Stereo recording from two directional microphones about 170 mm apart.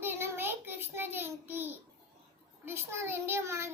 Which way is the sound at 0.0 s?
15° right (ahead or behind).